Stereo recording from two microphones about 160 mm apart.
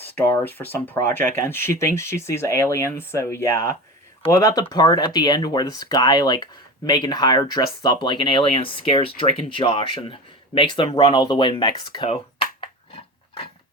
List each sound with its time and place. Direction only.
0.0 s speech: 10° left (ahead or behind); by 12.0 s 30° left (ahead or behind)
12.0 s dog: 35° left (ahead or behind)